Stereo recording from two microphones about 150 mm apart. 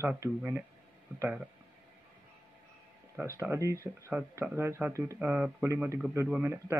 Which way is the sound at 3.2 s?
15° right (ahead or behind).